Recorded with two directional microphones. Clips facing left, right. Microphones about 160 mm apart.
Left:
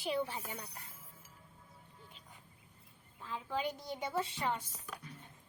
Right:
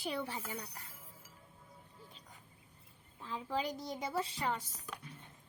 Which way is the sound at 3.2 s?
35° right (ahead or behind).